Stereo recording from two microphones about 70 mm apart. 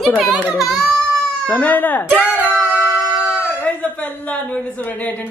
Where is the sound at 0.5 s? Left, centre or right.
Centre.